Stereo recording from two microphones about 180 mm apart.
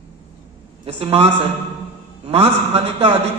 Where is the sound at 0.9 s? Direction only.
30° right (ahead or behind).